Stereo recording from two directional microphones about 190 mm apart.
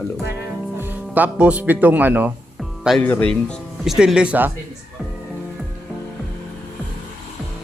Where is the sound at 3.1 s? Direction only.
5° left (ahead or behind).